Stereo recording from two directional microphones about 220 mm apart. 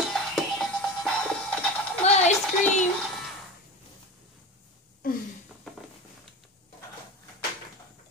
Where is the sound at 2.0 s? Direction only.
30° left (ahead or behind).